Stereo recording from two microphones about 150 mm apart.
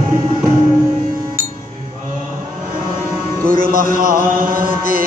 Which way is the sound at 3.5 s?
70° right (ahead or behind).